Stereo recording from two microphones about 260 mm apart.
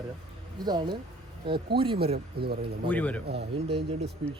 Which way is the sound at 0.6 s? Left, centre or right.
Centre.